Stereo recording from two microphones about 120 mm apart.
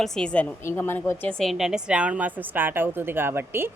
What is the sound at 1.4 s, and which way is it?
A woman's voice, centre (ahead or behind).